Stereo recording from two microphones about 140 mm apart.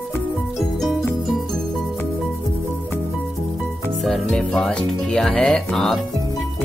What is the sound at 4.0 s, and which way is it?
Speech, 5° left (ahead or behind).